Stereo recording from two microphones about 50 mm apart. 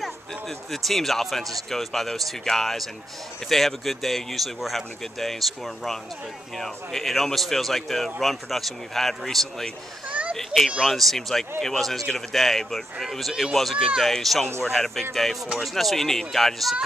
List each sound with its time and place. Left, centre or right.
0.0 s speech: centre
10.0 s children playing: right
10.3 s children playing: centre
10.8 s speech: centre